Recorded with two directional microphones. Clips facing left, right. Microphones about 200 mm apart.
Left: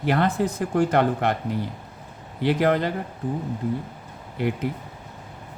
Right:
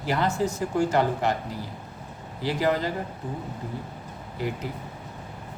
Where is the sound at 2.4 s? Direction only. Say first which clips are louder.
Left 4 dB; 60° left (ahead or behind).